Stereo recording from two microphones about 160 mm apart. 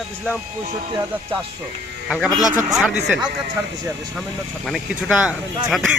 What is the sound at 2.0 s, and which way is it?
Speech, 5° right (ahead or behind).